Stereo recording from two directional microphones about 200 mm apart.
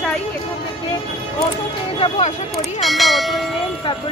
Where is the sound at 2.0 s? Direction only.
35° left (ahead or behind).